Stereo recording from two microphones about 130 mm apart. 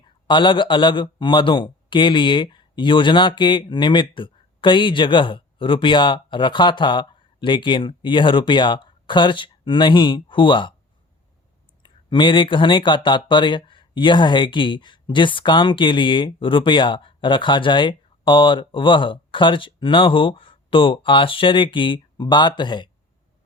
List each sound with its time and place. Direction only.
0.0 s a man's voice: 40° left (ahead or behind)
11.8 s speech: 40° left (ahead or behind)